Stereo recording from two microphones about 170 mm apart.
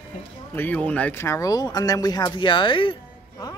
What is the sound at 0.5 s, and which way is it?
Speech, 10° left (ahead or behind).